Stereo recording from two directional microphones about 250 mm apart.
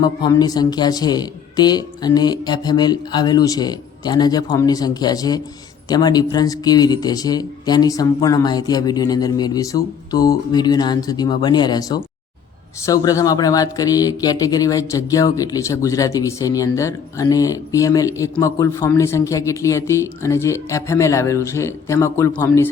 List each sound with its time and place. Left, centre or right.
0.0 s speech: centre